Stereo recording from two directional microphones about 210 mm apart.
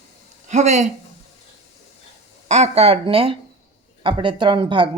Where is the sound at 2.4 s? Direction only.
30° right (ahead or behind).